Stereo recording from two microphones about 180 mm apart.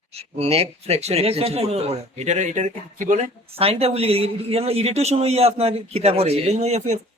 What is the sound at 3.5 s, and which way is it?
A man's voice, 35° right (ahead or behind).